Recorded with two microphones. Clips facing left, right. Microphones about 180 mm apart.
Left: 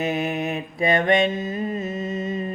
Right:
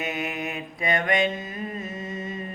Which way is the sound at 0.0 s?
30° left (ahead or behind).